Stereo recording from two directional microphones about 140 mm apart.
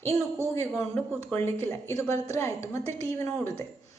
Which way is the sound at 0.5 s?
15° left (ahead or behind).